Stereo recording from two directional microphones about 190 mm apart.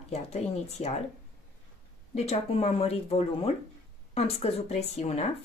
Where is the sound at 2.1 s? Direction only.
35° left (ahead or behind).